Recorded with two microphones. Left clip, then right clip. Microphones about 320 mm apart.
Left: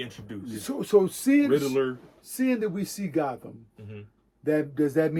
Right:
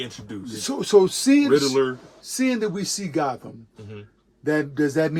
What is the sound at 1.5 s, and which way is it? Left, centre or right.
Speech, centre.